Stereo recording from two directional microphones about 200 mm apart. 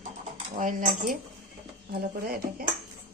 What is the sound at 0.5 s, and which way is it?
Speech, 40° right (ahead or behind).